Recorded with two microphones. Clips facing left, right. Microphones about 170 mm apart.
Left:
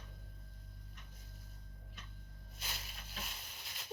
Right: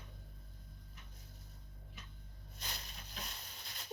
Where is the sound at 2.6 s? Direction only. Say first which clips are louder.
Even; 5° left (ahead or behind).